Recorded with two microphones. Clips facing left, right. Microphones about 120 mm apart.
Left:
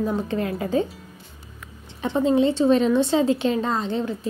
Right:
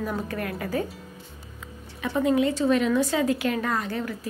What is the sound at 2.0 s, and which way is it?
A woman's voice, 25° left (ahead or behind).